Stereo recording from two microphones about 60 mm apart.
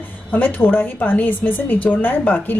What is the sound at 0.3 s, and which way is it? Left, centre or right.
A woman's voice, left.